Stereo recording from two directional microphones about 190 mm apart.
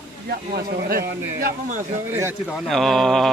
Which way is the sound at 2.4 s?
Centre (ahead or behind).